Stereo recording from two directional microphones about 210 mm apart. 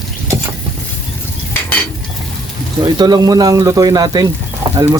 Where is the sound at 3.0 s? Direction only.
20° right (ahead or behind).